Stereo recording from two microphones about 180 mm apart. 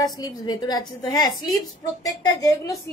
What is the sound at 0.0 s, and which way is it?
A woman's voice, 20° left (ahead or behind).